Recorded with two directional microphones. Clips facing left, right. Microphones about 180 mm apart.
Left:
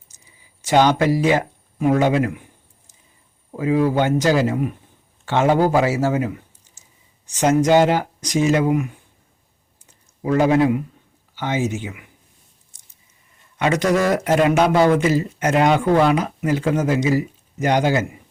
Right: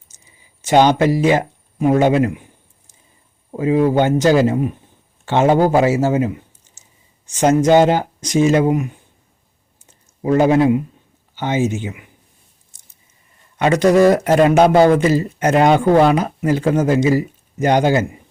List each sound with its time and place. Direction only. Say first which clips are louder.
0.1 s a sound: right 2 dB; 25° right (ahead or behind)
0.6 s speech: right 3 dB; 25° right (ahead or behind)
3.5 s speech: right 3 dB; 25° right (ahead or behind)
10.2 s speech: right 3 dB; 25° right (ahead or behind)
13.6 s speech: right 6 dB; 30° right (ahead or behind)